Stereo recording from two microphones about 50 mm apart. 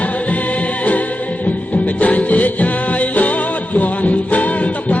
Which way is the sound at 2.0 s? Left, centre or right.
Left.